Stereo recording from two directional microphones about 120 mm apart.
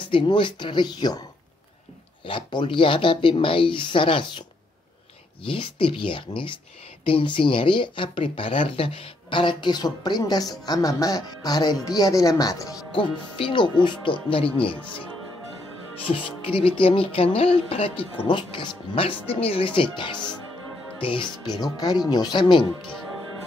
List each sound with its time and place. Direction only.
0.1 s speech: 45° left (ahead or behind)
2.2 s speech: 45° left (ahead or behind)
12.9 s speech: 45° left (ahead or behind)
16.1 s speech: 50° left (ahead or behind)
22.8 s speech: 5° left (ahead or behind)